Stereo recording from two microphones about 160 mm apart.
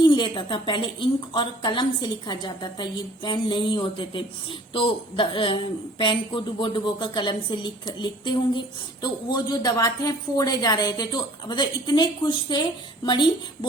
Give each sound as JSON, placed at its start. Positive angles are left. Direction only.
{"t": 0.0, "sound": "a woman's voice", "side_deg": 30}